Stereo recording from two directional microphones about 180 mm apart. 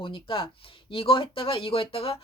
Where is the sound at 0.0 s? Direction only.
30° left (ahead or behind).